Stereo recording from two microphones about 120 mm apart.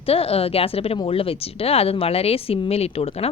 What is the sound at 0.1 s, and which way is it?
A woman's voice, 55° left (ahead or behind).